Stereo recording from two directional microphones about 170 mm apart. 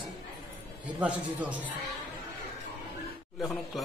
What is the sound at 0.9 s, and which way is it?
Speech, 10° right (ahead or behind).